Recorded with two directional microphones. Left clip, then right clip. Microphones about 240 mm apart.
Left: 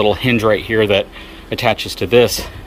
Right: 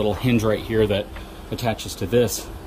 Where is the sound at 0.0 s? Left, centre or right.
Centre.